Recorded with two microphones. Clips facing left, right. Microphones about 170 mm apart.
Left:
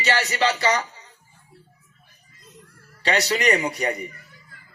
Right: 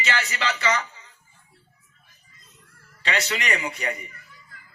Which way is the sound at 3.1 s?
35° left (ahead or behind).